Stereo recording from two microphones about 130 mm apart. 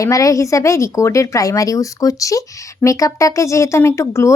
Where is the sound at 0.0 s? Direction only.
25° left (ahead or behind).